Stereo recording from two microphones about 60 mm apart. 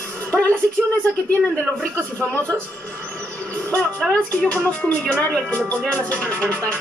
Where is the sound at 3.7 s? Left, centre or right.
Centre.